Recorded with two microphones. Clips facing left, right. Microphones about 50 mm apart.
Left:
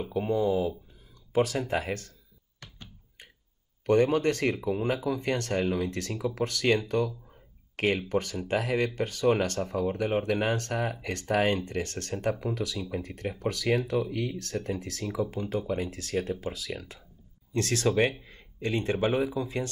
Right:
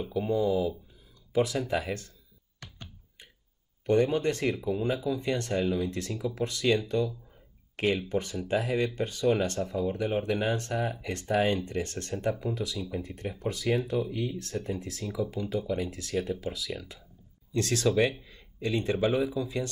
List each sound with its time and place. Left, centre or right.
0.1 s speech: left
3.8 s speech: left
17.6 s speech: left